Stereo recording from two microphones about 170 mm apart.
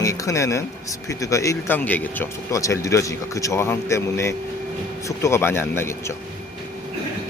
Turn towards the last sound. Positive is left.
turn(degrees=15)  # may be behind; listen again after turning